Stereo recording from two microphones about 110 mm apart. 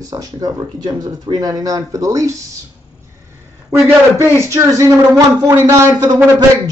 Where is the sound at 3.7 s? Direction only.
25° right (ahead or behind).